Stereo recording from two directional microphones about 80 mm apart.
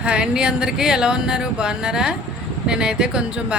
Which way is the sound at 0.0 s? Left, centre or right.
Centre.